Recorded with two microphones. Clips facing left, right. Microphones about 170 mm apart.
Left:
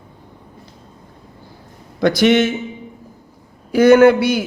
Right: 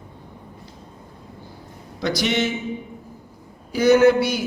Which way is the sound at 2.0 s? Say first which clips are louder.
Left 9 dB; 55° left (ahead or behind).